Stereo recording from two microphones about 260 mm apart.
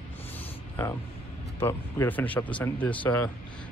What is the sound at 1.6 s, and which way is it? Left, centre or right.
Speech, centre.